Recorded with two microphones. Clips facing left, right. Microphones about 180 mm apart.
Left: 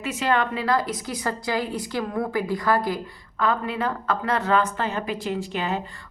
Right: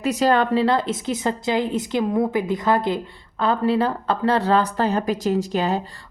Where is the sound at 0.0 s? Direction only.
35° right (ahead or behind).